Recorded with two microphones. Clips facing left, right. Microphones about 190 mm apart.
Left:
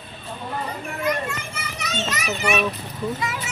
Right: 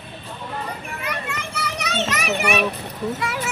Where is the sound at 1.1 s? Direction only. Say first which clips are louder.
Even; 65° right (ahead or behind).